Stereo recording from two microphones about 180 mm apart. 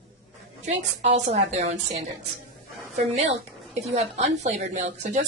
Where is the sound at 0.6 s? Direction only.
40° right (ahead or behind).